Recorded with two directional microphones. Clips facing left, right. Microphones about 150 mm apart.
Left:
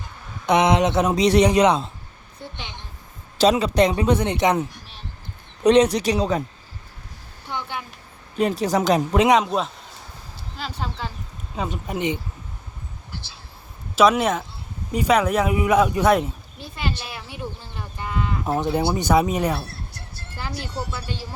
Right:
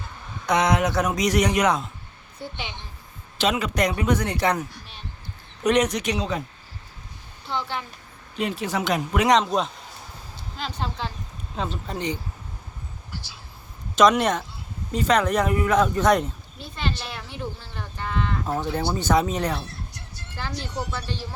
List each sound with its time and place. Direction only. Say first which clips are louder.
0.4 s speech: left 4 dB; 20° left (ahead or behind)
2.4 s speech: right 2 dB; 5° right (ahead or behind)
3.3 s speech: left 6 dB; 35° left (ahead or behind); by 4.6 s 20° left (ahead or behind)
5.6 s speech: left 5 dB; 30° left (ahead or behind)
7.4 s a woman's voice: right 1 dB; 15° left (ahead or behind)
8.4 s speech: left 6 dB; 40° left (ahead or behind)
9.3 s speech: left 1 dB; 10° left (ahead or behind)
13.9 s speech: left 1 dB; 5° left (ahead or behind)
17.6 s livestock: even; 10° left (ahead or behind)
18.5 s speech: left 5 dB; 20° left (ahead or behind)